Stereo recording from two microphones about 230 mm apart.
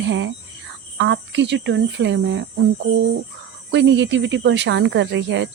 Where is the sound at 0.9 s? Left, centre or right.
Right.